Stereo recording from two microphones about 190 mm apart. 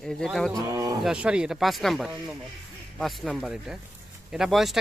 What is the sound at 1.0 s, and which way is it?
Speech, 5° right (ahead or behind).